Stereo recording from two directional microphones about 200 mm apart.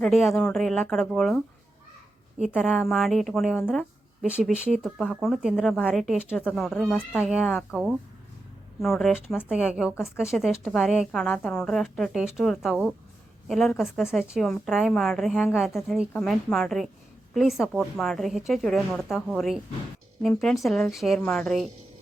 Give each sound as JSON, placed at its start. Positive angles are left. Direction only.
{"t": 0.0, "sound": "a woman's voice", "side_deg": 0}
{"t": 2.6, "sound": "a woman's voice", "side_deg": 0}
{"t": 3.6, "sound": "a sound", "side_deg": 5}
{"t": 4.3, "sound": "a woman's voice", "side_deg": -5}